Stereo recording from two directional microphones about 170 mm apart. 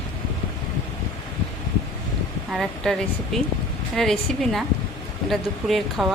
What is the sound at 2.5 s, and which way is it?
Speech, centre (ahead or behind).